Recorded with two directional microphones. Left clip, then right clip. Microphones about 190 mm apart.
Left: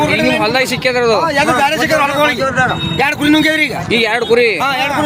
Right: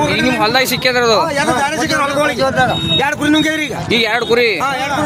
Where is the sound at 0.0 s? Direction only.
35° left (ahead or behind).